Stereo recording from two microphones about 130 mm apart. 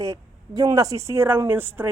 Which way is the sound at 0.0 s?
25° right (ahead or behind).